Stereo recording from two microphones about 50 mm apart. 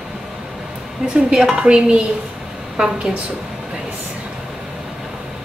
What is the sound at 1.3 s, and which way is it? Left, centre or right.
Stir, centre.